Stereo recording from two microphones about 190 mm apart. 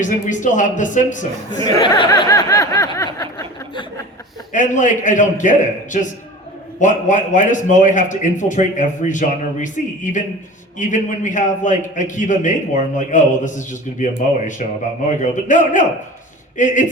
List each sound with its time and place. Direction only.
0.0 s a man's voice: 40° left (ahead or behind)
1.5 s speech: 20° left (ahead or behind)
3.2 s a sound: 15° left (ahead or behind)
4.5 s a man's voice: 40° left (ahead or behind)